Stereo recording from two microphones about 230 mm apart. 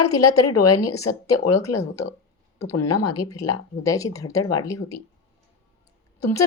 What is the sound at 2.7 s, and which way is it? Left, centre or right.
Speech, left.